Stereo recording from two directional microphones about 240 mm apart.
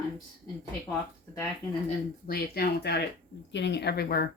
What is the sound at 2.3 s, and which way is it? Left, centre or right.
A woman's voice, left.